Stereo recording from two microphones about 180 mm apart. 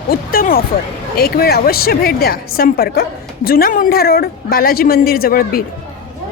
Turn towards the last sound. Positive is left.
turn(degrees=55)  # may be behind; listen again after turning